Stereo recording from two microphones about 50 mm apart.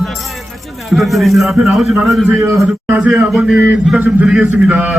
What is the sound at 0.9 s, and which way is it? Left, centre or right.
A man's voice, centre.